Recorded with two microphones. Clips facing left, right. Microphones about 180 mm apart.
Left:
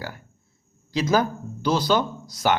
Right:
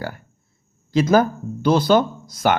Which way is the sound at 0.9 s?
50° right (ahead or behind).